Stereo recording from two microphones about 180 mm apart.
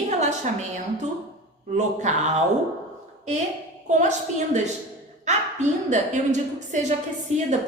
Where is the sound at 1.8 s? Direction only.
40° right (ahead or behind).